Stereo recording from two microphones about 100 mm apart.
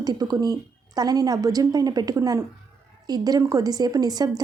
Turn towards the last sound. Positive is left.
turn(degrees=-40)  # may be behind; listen again after turning